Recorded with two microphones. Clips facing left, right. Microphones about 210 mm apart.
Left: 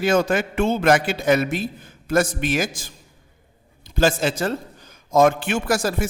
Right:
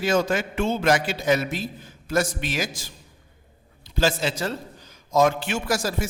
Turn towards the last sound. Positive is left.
turn(degrees=55)  # may be behind; listen again after turning